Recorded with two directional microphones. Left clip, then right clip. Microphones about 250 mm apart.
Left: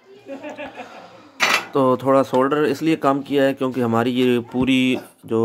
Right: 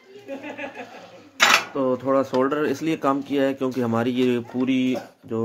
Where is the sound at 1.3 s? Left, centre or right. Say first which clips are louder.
Right 1 dB; centre.